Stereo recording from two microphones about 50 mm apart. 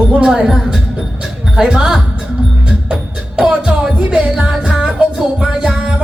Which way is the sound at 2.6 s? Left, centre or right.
Right.